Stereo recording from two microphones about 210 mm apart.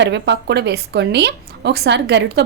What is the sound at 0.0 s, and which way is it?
A woman's voice, 55° right (ahead or behind).